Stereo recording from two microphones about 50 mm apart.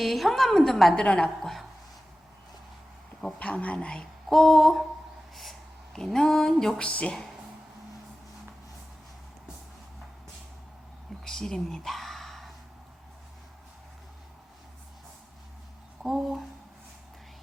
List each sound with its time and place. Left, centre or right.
0.0 s a woman's voice: centre
0.9 s a woman's voice: centre
3.3 s speech: left
3.8 s a woman's voice: centre
4.3 s a woman's voice: centre
5.3 s a sound: centre
6.7 s speech: left
11.2 s speech: centre
16.0 s a woman's voice: centre